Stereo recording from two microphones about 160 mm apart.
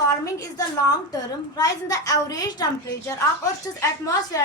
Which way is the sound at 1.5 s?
20° left (ahead or behind).